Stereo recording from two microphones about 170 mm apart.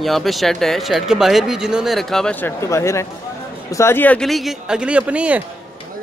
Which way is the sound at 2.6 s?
15° left (ahead or behind).